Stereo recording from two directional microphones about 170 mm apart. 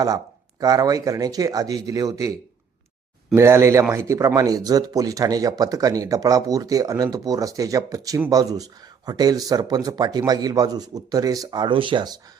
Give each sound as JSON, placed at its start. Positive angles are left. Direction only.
{"t": 0.6, "sound": "speech", "side_deg": -20}
{"t": 3.3, "sound": "speech", "side_deg": -15}